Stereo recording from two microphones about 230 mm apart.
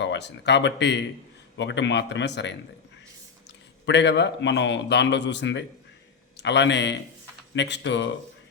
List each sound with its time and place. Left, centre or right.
0.0 s a man's voice: left
3.8 s a man's voice: left